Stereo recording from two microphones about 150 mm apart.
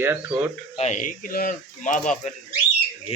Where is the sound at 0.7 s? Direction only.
50° left (ahead or behind).